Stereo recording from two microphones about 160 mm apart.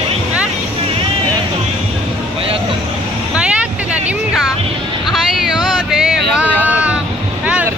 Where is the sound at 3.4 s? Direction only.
10° right (ahead or behind).